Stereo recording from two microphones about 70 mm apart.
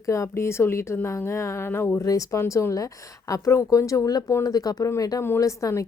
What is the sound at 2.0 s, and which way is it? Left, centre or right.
Speech, left.